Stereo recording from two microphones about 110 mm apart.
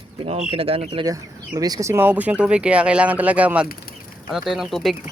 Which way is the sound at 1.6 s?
35° right (ahead or behind).